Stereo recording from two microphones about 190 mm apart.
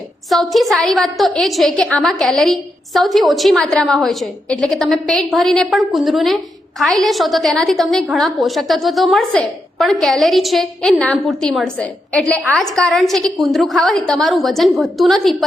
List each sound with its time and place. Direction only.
0.3 s a woman's voice: centre (ahead or behind)